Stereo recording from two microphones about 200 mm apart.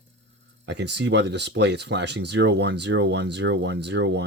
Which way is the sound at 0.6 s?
60° right (ahead or behind).